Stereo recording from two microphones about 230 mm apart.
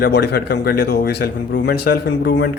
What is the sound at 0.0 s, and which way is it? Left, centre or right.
A man's voice, left.